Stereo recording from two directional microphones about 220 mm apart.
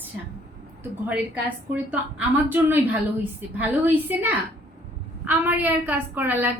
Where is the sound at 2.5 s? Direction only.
10° right (ahead or behind).